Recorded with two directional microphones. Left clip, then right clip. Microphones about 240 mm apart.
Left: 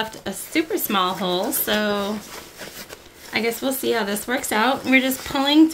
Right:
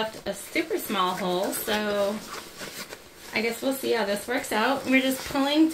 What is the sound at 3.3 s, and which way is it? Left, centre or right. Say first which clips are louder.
Speech: left 4 dB; left.